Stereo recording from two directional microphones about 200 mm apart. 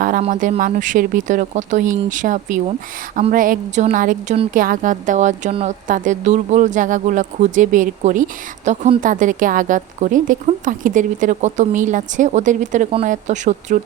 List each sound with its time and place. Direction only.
0.2 s a woman's voice: 40° right (ahead or behind)